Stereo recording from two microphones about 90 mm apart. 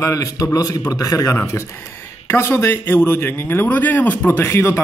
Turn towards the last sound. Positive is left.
turn(degrees=30)  # may be behind; listen again after turning